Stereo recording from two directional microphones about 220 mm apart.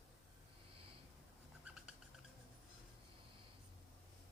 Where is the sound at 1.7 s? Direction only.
5° right (ahead or behind).